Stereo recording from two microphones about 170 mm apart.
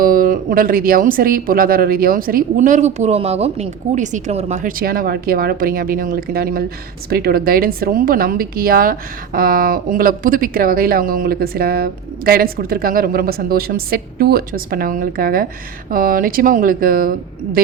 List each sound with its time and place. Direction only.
0.0 s a woman's voice: 55° right (ahead or behind)